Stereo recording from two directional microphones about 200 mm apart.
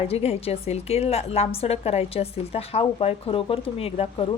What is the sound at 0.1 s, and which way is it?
A woman's voice, 30° left (ahead or behind).